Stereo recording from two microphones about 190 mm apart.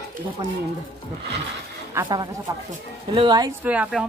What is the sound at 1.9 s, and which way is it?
Speech, 15° right (ahead or behind).